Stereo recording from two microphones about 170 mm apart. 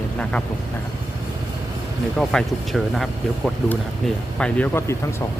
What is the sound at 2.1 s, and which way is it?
Speech, centre (ahead or behind).